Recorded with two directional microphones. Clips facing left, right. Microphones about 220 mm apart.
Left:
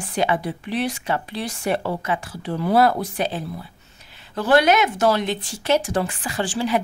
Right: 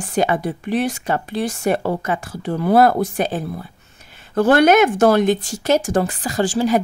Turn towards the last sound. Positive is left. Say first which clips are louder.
# right 6 dB
turn(degrees=-40)  # may be behind; listen again after turning